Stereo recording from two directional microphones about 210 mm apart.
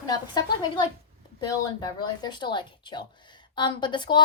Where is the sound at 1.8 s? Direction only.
20° left (ahead or behind).